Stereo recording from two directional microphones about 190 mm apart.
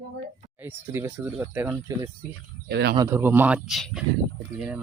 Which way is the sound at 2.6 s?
55° right (ahead or behind).